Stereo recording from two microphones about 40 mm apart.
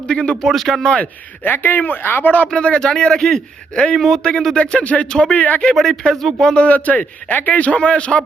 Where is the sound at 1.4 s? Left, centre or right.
Left.